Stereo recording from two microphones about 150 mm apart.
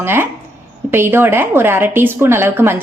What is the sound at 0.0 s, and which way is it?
A woman's voice, 15° right (ahead or behind).